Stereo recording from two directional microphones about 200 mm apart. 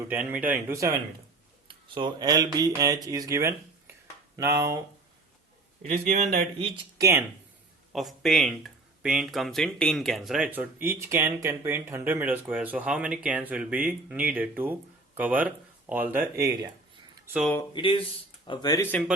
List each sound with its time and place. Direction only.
0.1 s speech: 10° right (ahead or behind)
1.6 s speech: 25° right (ahead or behind)
5.8 s a man's voice: 35° right (ahead or behind)
6.6 s speech: 15° right (ahead or behind)
7.9 s speech: centre (ahead or behind)
17.7 s speech: 25° left (ahead or behind)